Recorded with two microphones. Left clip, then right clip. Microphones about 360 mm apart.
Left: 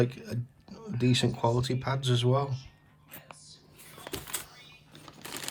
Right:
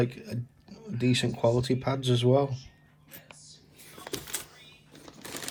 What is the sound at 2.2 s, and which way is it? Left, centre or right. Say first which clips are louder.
Speech: right 6 dB; left.